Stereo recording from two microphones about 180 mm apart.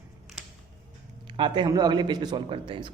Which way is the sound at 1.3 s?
25° right (ahead or behind).